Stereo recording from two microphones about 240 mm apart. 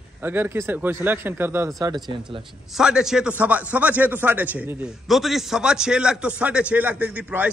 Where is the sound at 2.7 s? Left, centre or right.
Centre.